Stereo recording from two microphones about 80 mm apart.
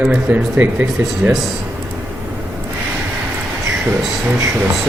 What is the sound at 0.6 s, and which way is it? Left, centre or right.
Speech, right.